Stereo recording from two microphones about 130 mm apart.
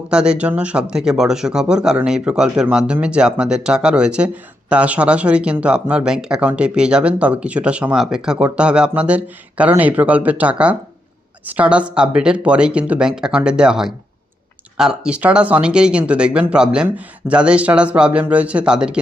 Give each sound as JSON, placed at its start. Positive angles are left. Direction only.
{"t": 0.1, "sound": "speech", "side_deg": -5}